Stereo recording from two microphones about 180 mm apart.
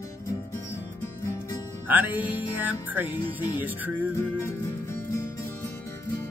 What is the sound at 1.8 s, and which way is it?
Music, 10° right (ahead or behind).